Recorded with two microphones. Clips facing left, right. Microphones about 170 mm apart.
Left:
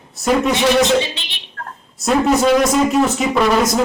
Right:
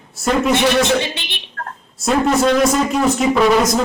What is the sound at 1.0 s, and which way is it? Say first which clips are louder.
Speech: right 2 dB; 60° right (ahead or behind).